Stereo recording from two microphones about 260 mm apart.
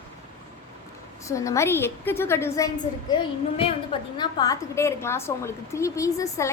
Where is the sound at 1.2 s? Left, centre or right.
Centre.